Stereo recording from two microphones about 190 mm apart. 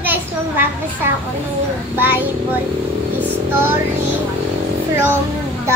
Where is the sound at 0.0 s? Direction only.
10° right (ahead or behind).